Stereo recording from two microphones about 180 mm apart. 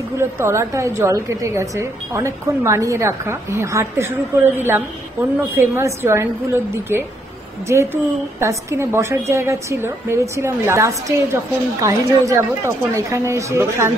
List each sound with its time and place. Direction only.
0.2 s a woman's voice: 15° right (ahead or behind)